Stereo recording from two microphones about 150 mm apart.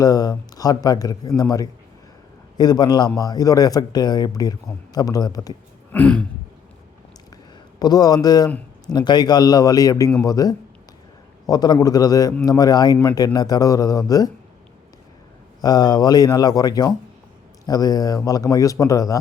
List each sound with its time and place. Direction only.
0.0 s speech: 25° left (ahead or behind)
5.9 s throat clearing: 10° left (ahead or behind)
7.8 s speech: 25° left (ahead or behind)
15.6 s speech: 25° left (ahead or behind)